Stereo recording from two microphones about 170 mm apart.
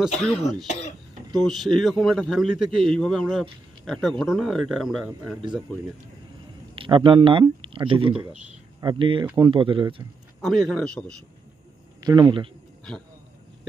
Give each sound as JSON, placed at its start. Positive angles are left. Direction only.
{"t": 0.3, "sound": "speech", "side_deg": 0}
{"t": 6.7, "sound": "speech", "side_deg": -30}
{"t": 8.1, "sound": "speech", "side_deg": -5}
{"t": 8.8, "sound": "speech", "side_deg": -30}
{"t": 10.4, "sound": "speech", "side_deg": 0}
{"t": 12.0, "sound": "a man's voice", "side_deg": -25}